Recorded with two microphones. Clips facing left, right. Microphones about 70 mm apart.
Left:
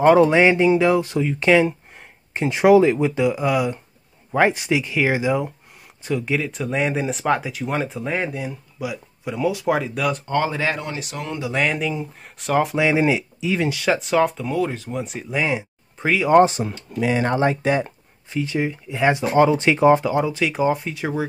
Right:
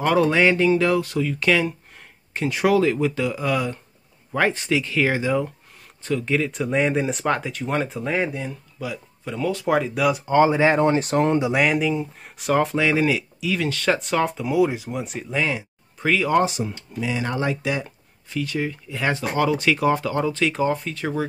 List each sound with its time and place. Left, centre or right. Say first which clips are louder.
0.0 s speech: left 5 dB; left; by 10.3 s centre
10.3 s speech: right 8 dB; centre; by 11.3 s right
11.5 s speech: right 2 dB; centre
12.7 s speech: left 2 dB; centre
13.7 s speech: left 1 dB; centre
15.3 s speech: left 2 dB; centre
16.3 s speech: left 10 dB; left
16.6 s speech: left 5 dB; left
18.3 s speech: left 3 dB; left